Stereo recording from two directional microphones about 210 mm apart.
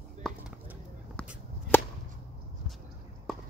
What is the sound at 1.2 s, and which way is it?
Chop, 5° left (ahead or behind).